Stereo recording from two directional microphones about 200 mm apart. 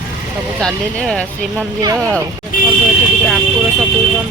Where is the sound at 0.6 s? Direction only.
5° left (ahead or behind).